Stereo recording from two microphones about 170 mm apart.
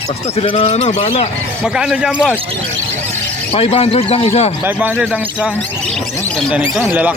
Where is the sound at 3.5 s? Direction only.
35° left (ahead or behind).